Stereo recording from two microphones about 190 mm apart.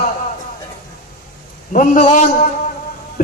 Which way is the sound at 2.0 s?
40° left (ahead or behind).